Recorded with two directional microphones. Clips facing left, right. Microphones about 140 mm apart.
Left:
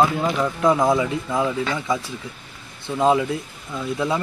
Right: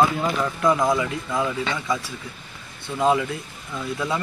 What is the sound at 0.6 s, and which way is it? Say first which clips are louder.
Speech: left 2 dB; 25° left (ahead or behind).